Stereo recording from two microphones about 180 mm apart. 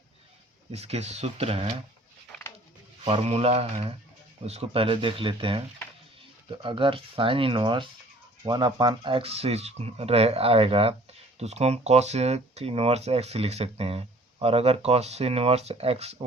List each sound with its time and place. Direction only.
0.7 s speech: 35° right (ahead or behind)
3.0 s speech: 35° right (ahead or behind)